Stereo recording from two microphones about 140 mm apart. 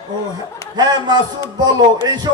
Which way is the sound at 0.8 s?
30° right (ahead or behind).